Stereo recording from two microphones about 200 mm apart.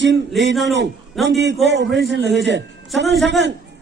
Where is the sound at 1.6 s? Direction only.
60° right (ahead or behind).